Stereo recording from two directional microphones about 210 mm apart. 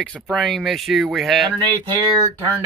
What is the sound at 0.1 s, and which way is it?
Speech, centre (ahead or behind).